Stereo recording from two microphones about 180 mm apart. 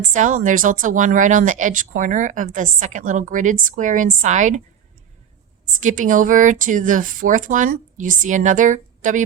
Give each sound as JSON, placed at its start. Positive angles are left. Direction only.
{"t": 0.0, "sound": "speech", "side_deg": -45}
{"t": 5.8, "sound": "speech", "side_deg": -45}